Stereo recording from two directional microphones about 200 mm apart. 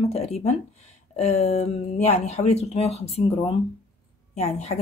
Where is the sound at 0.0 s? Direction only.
30° left (ahead or behind).